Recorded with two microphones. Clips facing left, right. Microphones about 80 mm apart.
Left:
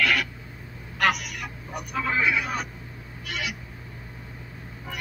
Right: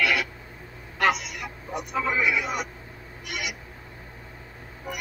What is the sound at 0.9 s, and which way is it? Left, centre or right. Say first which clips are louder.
Speech: right 1 dB; right.